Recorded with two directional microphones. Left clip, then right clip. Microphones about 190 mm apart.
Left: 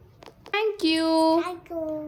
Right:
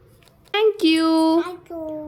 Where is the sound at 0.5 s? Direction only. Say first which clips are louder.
Right 6 dB; 15° right (ahead or behind).